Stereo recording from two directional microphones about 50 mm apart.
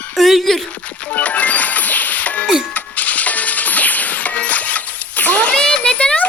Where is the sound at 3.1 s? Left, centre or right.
Left.